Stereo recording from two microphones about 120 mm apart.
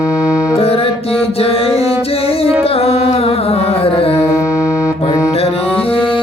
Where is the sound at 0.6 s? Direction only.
55° left (ahead or behind).